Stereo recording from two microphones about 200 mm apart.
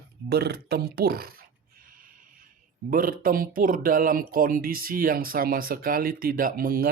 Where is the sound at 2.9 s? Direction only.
45° right (ahead or behind).